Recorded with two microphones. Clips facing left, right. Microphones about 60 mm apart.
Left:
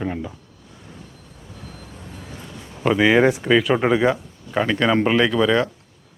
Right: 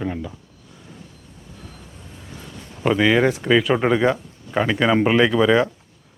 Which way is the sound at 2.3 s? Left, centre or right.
Centre.